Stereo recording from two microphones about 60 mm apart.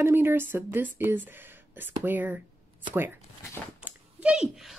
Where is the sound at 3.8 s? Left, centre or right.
Right.